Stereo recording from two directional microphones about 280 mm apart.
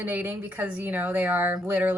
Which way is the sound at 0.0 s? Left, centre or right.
Centre.